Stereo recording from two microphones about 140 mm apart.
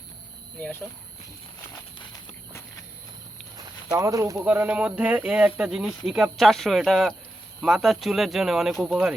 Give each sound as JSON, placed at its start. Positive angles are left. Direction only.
{"t": 3.9, "sound": "speech", "side_deg": -20}